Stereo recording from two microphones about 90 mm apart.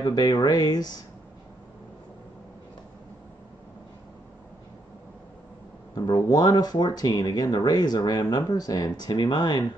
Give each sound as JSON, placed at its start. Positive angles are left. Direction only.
{"t": 0.0, "sound": "speech", "side_deg": 50}
{"t": 5.9, "sound": "speech", "side_deg": 45}